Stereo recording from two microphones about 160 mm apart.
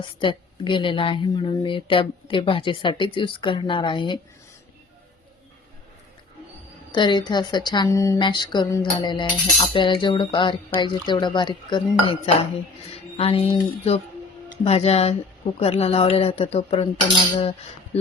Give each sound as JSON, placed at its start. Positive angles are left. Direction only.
{"t": 0.0, "sound": "a woman's voice", "side_deg": 30}
{"t": 6.9, "sound": "a woman's voice", "side_deg": 30}
{"t": 12.9, "sound": "music", "side_deg": 40}
{"t": 14.6, "sound": "a woman's voice", "side_deg": 40}